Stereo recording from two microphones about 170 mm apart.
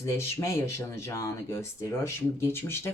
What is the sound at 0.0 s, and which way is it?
Speech, 15° left (ahead or behind).